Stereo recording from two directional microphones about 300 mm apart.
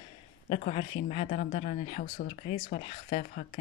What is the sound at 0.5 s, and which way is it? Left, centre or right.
Speech, left.